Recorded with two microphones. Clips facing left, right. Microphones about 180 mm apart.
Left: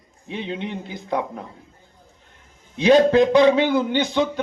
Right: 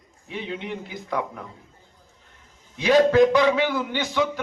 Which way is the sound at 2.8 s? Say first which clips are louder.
Left 2 dB; 25° left (ahead or behind).